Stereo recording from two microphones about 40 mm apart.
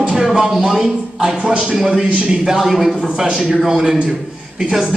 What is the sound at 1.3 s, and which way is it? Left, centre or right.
Speech, right.